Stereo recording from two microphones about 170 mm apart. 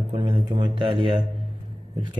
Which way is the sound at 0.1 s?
30° right (ahead or behind).